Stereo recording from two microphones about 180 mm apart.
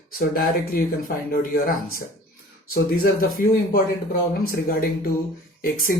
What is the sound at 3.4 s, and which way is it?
Speech, 55° left (ahead or behind).